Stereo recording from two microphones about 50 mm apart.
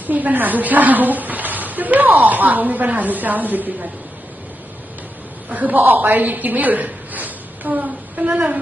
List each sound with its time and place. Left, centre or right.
0.1 s a woman's voice: right
5.5 s a woman's voice: right